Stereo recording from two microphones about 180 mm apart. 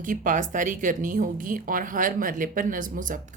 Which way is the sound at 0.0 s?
50° right (ahead or behind).